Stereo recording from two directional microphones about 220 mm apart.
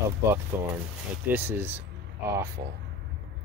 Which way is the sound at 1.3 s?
10° right (ahead or behind).